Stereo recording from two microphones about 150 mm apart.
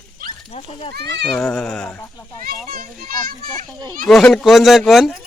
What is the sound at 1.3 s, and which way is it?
Speech, 5° left (ahead or behind).